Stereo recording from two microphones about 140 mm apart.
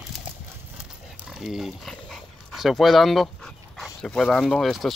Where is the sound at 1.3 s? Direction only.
5° right (ahead or behind).